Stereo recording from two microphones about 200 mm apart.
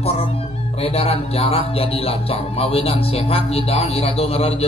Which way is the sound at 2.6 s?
30° left (ahead or behind).